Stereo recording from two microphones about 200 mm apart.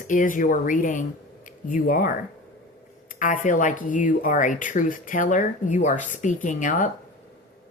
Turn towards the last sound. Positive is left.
turn(degrees=40)  # may be behind; listen again after turning